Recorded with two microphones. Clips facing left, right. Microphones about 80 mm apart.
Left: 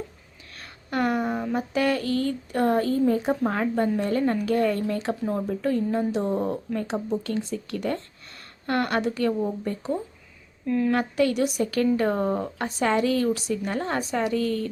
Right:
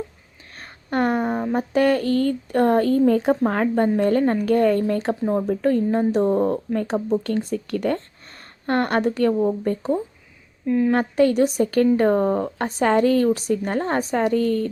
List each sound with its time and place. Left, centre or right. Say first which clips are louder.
0.5 s a sound: right 4 dB; right
1.5 s speech: right 6 dB; right
3.1 s a woman's voice: right 5 dB; right
3.5 s speech: right 4 dB; right
7.1 s speech: right 5 dB; right
8.6 s speech: right 4 dB; right
10.7 s a woman's voice: right 4 dB; centre
10.9 s speech: right 5 dB; right